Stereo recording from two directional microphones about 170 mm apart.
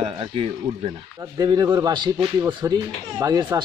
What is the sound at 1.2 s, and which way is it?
Speech, 20° right (ahead or behind).